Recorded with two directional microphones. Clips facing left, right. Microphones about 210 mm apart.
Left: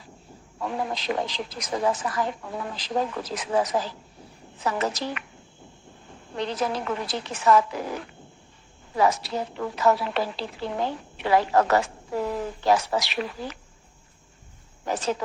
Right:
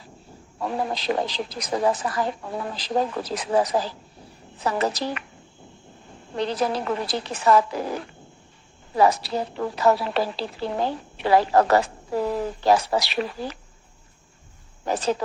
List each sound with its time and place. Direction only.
0.6 s a woman's voice: 35° right (ahead or behind)
6.3 s a woman's voice: 35° right (ahead or behind)
14.8 s a woman's voice: 35° right (ahead or behind)